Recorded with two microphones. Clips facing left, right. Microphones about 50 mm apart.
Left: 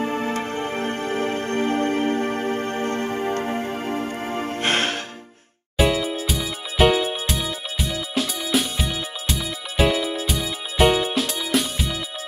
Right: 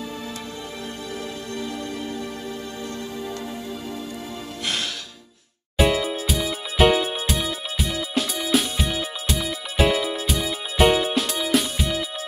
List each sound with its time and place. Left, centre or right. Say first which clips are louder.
0.0 s music: left 9 dB; left
5.8 s music: even; centre